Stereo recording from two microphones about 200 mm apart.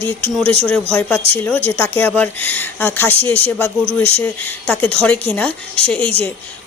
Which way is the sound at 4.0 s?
30° right (ahead or behind).